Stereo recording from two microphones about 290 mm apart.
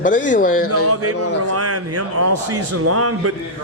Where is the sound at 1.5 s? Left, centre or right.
Right.